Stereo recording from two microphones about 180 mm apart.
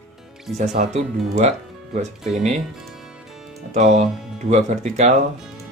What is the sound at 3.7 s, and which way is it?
Speech, 40° right (ahead or behind).